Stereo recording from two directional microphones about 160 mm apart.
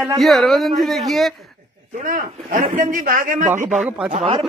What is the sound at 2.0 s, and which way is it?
A man's voice, 55° right (ahead or behind).